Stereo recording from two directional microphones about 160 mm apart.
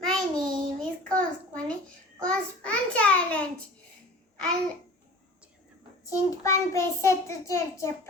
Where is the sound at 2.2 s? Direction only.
5° left (ahead or behind).